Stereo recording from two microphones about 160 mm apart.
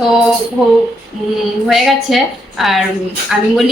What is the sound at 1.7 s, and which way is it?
A woman's voice, centre (ahead or behind).